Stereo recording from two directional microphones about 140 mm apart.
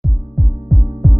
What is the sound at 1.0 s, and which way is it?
Music, centre (ahead or behind).